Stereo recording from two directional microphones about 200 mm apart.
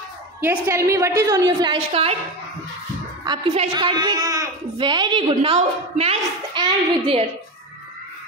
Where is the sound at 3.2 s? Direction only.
25° right (ahead or behind).